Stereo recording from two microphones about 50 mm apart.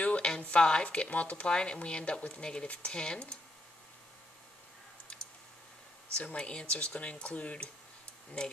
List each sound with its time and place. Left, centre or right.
0.0 s a sound: left
0.4 s speech: left
6.1 s speech: centre